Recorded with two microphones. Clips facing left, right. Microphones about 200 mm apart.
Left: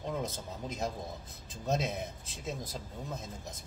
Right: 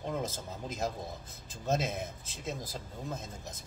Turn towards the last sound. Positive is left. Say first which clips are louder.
# even
turn(degrees=0)  # may be behind; listen again after turning